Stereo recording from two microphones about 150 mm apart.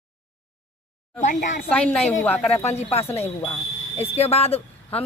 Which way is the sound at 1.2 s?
60° left (ahead or behind).